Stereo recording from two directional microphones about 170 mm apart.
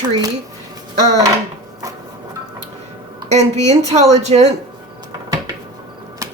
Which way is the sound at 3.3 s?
40° right (ahead or behind).